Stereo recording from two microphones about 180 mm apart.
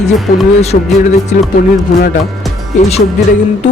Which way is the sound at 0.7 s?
45° left (ahead or behind).